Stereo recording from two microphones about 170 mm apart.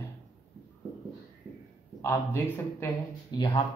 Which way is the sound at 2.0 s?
15° left (ahead or behind).